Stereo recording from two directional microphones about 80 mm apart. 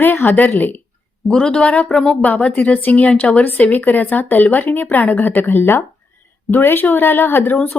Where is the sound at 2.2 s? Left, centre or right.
Centre.